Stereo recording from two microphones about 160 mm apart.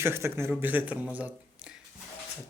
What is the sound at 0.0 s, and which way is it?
Speech, 15° right (ahead or behind).